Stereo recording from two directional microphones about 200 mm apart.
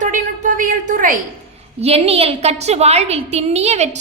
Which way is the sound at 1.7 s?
30° right (ahead or behind).